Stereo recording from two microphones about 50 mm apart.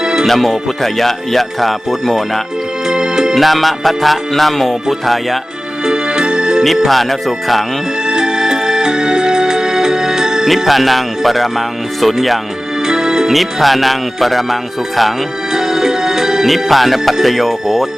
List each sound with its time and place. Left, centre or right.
0.0 s music: centre
0.3 s music: centre
2.8 s music: centre
3.3 s music: centre
5.8 s music: centre
6.6 s music: centre
8.0 s music: centre
10.7 s music: centre
12.8 s music: centre